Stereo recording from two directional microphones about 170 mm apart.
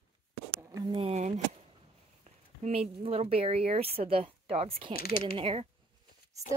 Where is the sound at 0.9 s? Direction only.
40° right (ahead or behind).